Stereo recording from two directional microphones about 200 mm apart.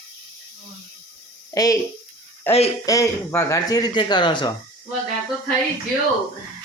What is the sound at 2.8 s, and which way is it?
Speech, 15° left (ahead or behind).